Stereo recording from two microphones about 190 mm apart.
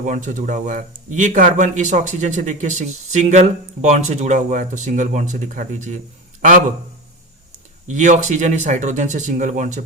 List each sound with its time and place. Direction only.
0.0 s speech: 40° right (ahead or behind)
7.9 s speech: 40° right (ahead or behind)